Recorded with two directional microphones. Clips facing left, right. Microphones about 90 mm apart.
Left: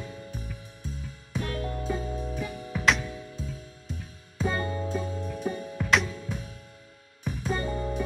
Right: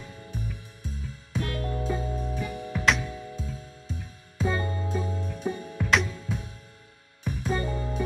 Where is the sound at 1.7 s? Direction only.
10° right (ahead or behind).